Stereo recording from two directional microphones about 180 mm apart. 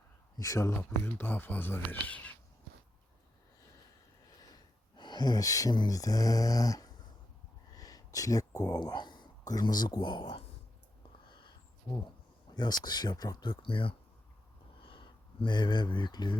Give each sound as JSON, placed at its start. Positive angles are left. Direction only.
{"t": 0.3, "sound": "speech", "side_deg": 20}
{"t": 4.4, "sound": "speech", "side_deg": 25}
{"t": 11.3, "sound": "a sound", "side_deg": 25}
{"t": 12.8, "sound": "speech", "side_deg": 25}